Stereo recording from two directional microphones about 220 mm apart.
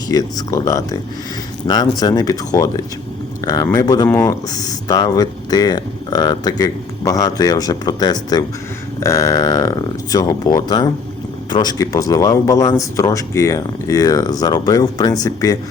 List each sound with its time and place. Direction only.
0.1 s speech: 15° left (ahead or behind)